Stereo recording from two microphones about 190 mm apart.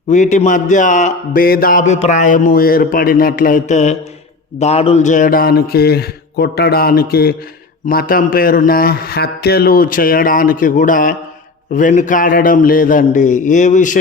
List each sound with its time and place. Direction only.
0.1 s a man's voice: 40° left (ahead or behind)